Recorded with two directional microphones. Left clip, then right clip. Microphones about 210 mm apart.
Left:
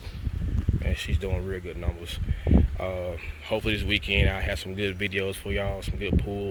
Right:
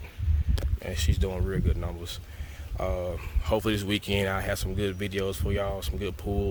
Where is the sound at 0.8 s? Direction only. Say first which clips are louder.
Right 1 dB; 15° right (ahead or behind).